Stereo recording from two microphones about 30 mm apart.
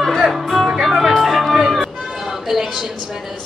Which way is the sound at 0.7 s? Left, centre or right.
Centre.